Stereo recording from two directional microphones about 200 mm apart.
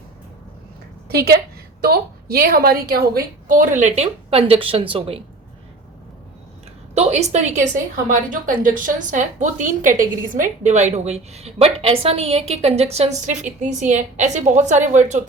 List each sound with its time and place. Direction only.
1.0 s a woman's voice: 50° right (ahead or behind); by 5.2 s 25° right (ahead or behind)
6.9 s a woman's voice: 35° right (ahead or behind)